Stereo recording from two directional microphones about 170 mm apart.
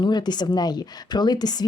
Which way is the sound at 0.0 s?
25° left (ahead or behind).